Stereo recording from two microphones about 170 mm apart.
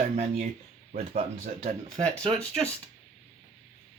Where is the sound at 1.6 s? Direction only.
35° right (ahead or behind).